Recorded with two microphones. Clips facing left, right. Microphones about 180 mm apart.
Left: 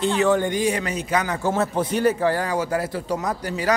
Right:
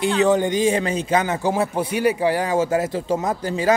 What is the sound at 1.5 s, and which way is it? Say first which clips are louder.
A man's voice: right 1 dB; 10° right (ahead or behind).